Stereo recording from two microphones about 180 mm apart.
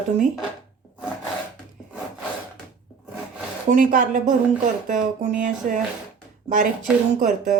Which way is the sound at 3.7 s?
45° right (ahead or behind).